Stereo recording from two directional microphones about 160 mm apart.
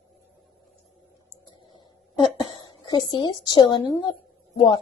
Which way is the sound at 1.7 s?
30° left (ahead or behind).